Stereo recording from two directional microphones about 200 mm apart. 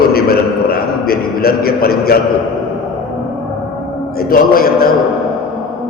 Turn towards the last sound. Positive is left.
turn(degrees=50)  # may be behind; listen again after turning